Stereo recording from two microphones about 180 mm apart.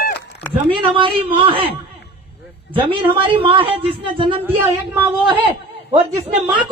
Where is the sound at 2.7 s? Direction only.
30° right (ahead or behind).